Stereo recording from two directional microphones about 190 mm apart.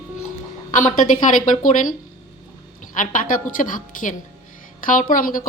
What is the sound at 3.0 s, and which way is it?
A woman's voice, 45° left (ahead or behind).